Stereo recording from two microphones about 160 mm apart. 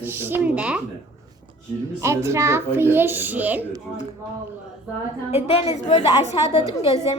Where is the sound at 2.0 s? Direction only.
15° right (ahead or behind).